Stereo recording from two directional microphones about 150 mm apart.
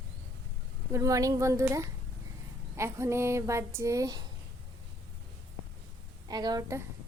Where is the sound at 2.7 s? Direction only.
20° right (ahead or behind).